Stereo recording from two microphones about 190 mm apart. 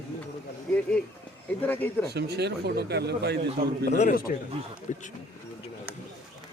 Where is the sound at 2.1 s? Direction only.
60° right (ahead or behind).